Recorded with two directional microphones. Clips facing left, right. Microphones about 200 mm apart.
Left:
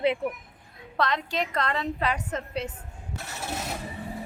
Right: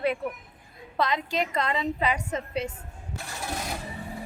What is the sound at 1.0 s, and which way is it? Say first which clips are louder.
A woman's voice: right 1 dB; 5° right (ahead or behind).